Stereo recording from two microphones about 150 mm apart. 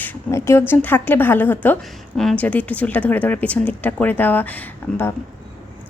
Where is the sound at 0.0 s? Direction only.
15° left (ahead or behind).